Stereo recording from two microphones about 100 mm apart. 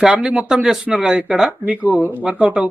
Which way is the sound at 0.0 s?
10° right (ahead or behind).